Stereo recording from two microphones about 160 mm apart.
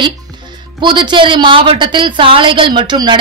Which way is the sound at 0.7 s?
30° right (ahead or behind).